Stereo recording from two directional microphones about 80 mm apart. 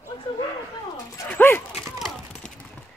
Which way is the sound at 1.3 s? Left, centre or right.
Left.